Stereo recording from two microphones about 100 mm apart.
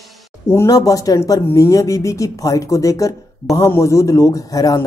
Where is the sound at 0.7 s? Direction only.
35° left (ahead or behind).